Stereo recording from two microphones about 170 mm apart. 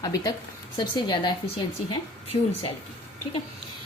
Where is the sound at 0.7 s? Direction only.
25° left (ahead or behind).